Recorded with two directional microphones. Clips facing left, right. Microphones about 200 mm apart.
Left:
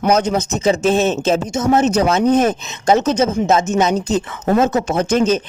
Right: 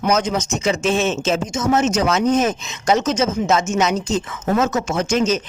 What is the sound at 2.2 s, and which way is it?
Speech, 60° left (ahead or behind).